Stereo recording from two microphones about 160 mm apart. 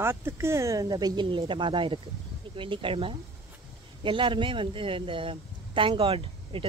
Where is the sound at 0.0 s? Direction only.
15° right (ahead or behind).